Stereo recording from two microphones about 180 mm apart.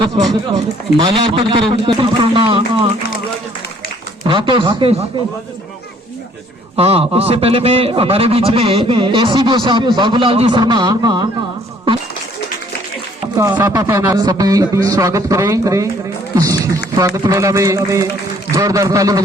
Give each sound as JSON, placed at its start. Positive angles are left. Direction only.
{"t": 0.5, "sound": "a man's voice", "side_deg": -25}
{"t": 4.2, "sound": "a man's voice", "side_deg": -25}
{"t": 6.7, "sound": "a man's voice", "side_deg": -35}
{"t": 13.3, "sound": "a man's voice", "side_deg": -15}